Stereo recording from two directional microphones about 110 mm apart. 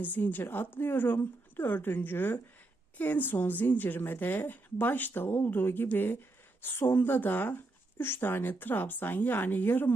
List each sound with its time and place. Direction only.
0.0 s a woman's voice: 15° left (ahead or behind)